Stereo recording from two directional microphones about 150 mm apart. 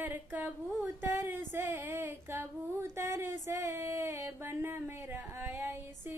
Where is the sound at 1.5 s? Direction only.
15° right (ahead or behind).